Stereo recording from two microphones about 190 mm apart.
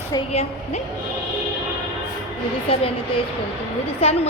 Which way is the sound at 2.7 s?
30° left (ahead or behind).